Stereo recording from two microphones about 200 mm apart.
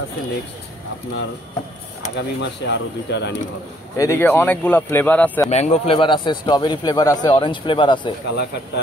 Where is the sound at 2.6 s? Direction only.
60° left (ahead or behind).